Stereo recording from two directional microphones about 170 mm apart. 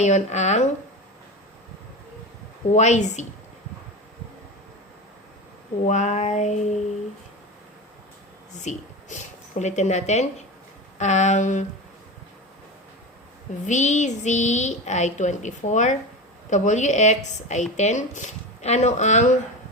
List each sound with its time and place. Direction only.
0.0 s speech: 45° left (ahead or behind)
2.7 s speech: 45° left (ahead or behind)
5.8 s speech: 45° left (ahead or behind)
8.5 s speech: 45° left (ahead or behind)
13.7 s speech: 45° left (ahead or behind)